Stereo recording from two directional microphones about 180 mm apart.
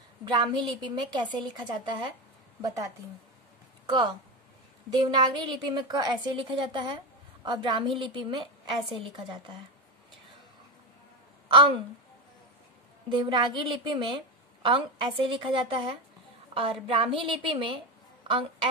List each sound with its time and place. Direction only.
0.2 s a woman's voice: 25° right (ahead or behind)
4.9 s a woman's voice: 25° right (ahead or behind)
13.1 s a woman's voice: 25° right (ahead or behind)